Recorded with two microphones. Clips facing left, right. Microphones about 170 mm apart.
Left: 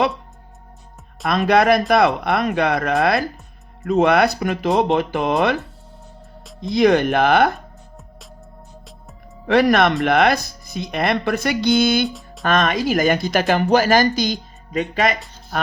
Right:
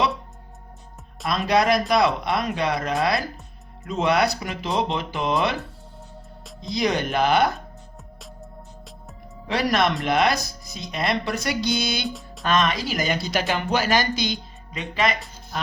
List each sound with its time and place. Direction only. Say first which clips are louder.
1.3 s speech: left 5 dB; 60° left (ahead or behind)
6.6 s speech: left 9 dB; 55° left (ahead or behind)
9.5 s speech: left 7 dB; 55° left (ahead or behind)
12.0 s music: left 5 dB; centre (ahead or behind)
12.5 s speech: left 4 dB; 50° left (ahead or behind)